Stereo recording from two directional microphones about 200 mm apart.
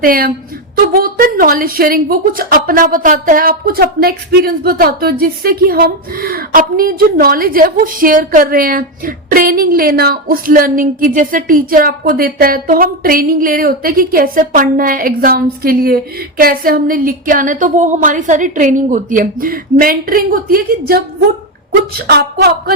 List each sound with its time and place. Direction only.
0.0 s a woman's voice: 45° right (ahead or behind)